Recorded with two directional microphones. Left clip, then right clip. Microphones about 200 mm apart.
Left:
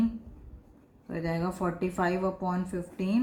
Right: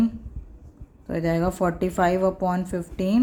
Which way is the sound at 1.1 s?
50° right (ahead or behind).